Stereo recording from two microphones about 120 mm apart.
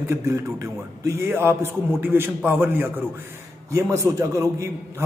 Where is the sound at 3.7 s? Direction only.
25° right (ahead or behind).